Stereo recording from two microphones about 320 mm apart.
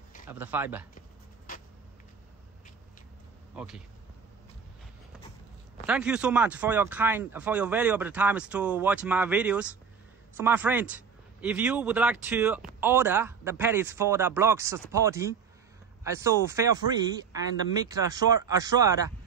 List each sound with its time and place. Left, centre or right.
0.3 s speech: centre
3.5 s speech: centre
5.9 s speech: centre
17.8 s speech: centre